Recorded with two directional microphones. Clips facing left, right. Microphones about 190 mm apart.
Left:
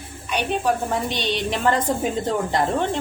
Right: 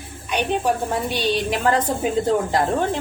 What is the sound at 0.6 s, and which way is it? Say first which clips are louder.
A woman's voice: even; 10° right (ahead or behind).